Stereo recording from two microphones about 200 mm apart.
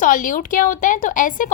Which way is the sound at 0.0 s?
40° left (ahead or behind).